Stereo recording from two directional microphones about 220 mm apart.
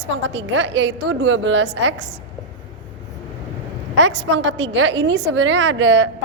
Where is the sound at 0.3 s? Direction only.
55° right (ahead or behind).